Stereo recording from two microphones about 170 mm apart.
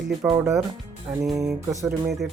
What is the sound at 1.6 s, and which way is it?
Music, 15° right (ahead or behind).